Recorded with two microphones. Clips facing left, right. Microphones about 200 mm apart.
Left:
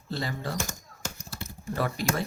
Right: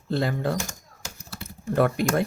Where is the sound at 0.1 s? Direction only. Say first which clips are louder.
Right 8 dB; 55° right (ahead or behind).